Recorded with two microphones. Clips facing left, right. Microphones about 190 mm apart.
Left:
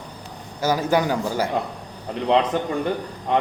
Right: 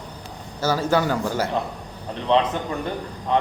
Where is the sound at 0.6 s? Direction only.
15° left (ahead or behind).